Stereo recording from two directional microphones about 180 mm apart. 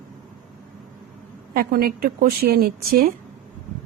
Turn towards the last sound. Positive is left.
turn(degrees=-55)  # may be behind; listen again after turning